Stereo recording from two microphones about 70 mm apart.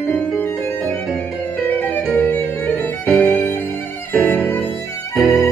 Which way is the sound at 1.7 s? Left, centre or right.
Left.